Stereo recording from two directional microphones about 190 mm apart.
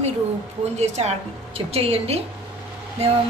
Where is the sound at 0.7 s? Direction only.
35° right (ahead or behind).